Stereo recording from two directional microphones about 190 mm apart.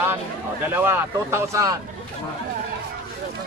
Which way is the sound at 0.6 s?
10° right (ahead or behind).